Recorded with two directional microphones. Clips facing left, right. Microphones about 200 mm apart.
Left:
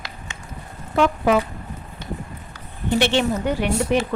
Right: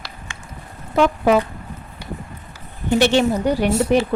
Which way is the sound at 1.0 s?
40° right (ahead or behind).